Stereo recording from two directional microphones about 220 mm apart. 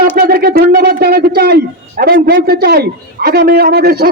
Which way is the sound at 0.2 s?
45° right (ahead or behind).